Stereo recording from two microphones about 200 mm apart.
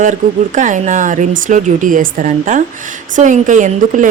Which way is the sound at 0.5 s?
40° right (ahead or behind).